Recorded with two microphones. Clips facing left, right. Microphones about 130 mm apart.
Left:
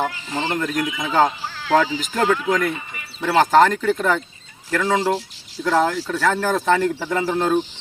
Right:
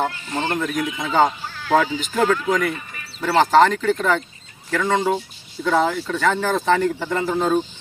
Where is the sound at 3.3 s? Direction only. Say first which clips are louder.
Even; 5° left (ahead or behind).